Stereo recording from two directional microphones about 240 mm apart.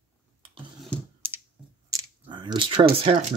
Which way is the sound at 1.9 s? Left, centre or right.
Centre.